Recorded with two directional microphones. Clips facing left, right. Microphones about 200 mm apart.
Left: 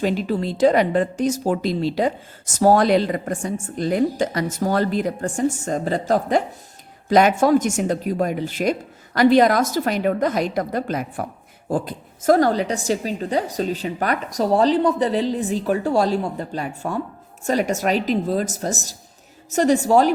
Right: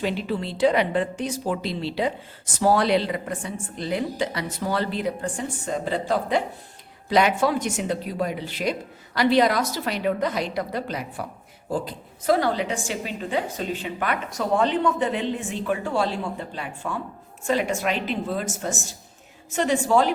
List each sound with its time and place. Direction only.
0.0 s a woman's voice: 40° left (ahead or behind)